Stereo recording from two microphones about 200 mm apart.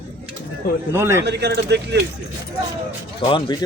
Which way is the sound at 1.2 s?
55° right (ahead or behind).